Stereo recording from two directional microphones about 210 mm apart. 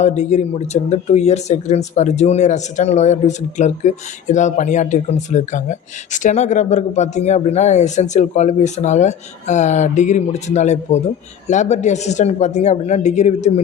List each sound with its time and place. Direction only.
0.0 s speech: 35° left (ahead or behind)